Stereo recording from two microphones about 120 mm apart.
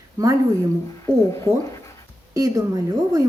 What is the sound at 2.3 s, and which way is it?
Speech, 30° right (ahead or behind).